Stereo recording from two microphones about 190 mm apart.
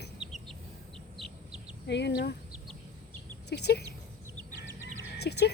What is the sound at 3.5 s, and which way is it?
Speech, 60° left (ahead or behind).